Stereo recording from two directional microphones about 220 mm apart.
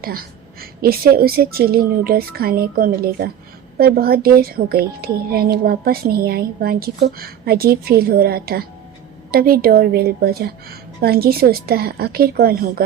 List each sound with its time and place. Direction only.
0.6 s a woman's voice: 45° right (ahead or behind)